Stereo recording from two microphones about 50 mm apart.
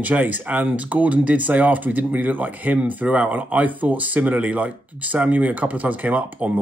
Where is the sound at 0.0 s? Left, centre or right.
Right.